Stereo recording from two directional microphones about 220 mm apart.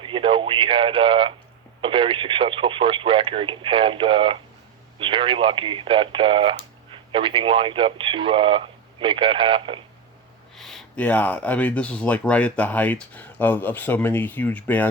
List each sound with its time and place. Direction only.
0.0 s speech: 25° right (ahead or behind)
10.6 s speech: centre (ahead or behind)